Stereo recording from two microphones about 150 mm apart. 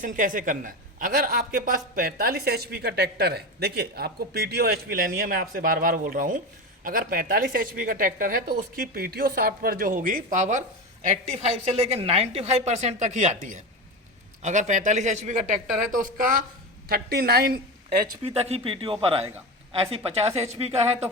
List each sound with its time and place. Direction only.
0.0 s a woman's voice: 60° right (ahead or behind)
11.0 s a woman's voice: 45° right (ahead or behind); by 16.4 s 65° right (ahead or behind)
16.9 s a woman's voice: 90° right
18.2 s a woman's voice: 45° right (ahead or behind)